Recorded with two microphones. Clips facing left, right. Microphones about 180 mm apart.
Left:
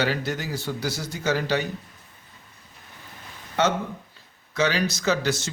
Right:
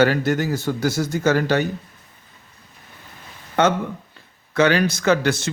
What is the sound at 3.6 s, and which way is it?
Speech, 55° right (ahead or behind).